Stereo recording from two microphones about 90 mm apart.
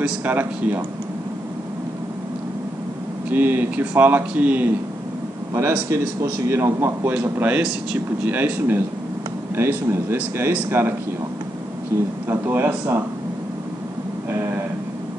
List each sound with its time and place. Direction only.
0.0 s speech: 20° right (ahead or behind)
3.3 s speech: 20° right (ahead or behind)
5.5 s speech: 30° right (ahead or behind)
7.3 s speech: 15° right (ahead or behind)
12.3 s speech: 20° right (ahead or behind)